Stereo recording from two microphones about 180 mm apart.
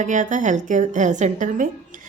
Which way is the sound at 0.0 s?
45° right (ahead or behind).